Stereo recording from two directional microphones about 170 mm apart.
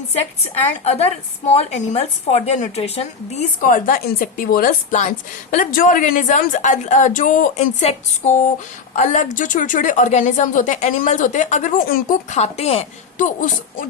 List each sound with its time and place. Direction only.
1.5 s a woman's voice: 40° left (ahead or behind)